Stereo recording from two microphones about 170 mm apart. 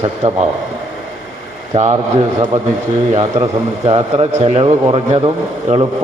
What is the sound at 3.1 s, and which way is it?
A man's voice, 30° right (ahead or behind).